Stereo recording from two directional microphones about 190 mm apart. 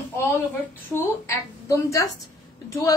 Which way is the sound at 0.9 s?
15° left (ahead or behind).